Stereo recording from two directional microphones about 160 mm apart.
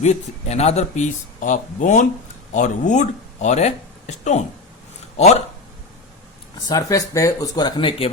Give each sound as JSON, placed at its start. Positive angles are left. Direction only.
{"t": 0.0, "sound": "speech", "side_deg": 45}
{"t": 6.7, "sound": "speech", "side_deg": 20}